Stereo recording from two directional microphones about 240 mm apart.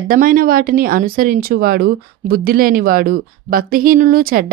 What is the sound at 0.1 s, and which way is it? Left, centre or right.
Speech, right.